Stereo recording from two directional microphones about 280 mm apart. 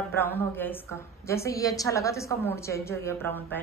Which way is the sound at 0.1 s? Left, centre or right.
Centre.